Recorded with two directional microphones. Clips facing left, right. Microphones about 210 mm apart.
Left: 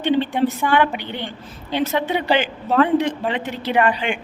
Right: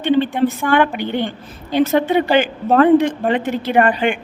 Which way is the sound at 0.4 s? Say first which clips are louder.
Right 3 dB; 50° right (ahead or behind).